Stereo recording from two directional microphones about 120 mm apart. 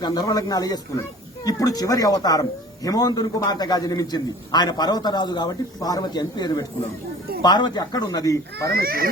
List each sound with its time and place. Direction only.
0.0 s speech: 35° left (ahead or behind)